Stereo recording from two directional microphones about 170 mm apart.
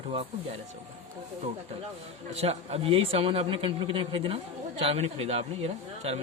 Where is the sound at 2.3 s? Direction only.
35° right (ahead or behind).